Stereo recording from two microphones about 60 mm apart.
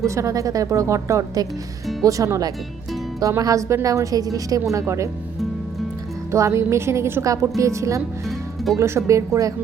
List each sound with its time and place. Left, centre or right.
0.0 s a woman's voice: right
3.2 s a woman's voice: right
6.3 s a woman's voice: right